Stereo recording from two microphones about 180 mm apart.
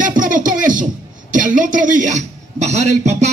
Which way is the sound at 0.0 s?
50° right (ahead or behind).